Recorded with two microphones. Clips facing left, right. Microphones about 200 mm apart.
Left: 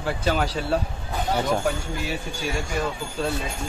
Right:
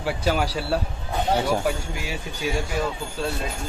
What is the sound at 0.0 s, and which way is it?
Speech, 10° right (ahead or behind).